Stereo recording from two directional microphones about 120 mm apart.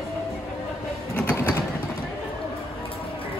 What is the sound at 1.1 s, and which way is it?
Mechanisms, 15° left (ahead or behind).